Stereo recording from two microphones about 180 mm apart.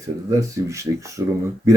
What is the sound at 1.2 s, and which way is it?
Speech, 15° right (ahead or behind).